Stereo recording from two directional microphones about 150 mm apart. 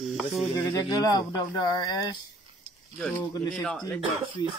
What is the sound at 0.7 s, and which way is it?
Speech, 25° left (ahead or behind).